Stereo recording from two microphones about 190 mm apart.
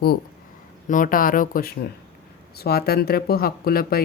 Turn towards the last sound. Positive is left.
turn(degrees=50)  # may be behind; listen again after turning